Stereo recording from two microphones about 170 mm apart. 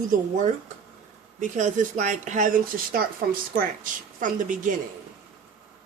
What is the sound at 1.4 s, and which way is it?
Speech, 45° right (ahead or behind).